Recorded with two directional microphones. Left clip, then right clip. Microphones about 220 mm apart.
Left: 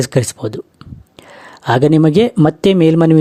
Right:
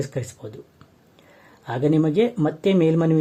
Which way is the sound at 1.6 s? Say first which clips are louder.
Left 10 dB; 35° left (ahead or behind).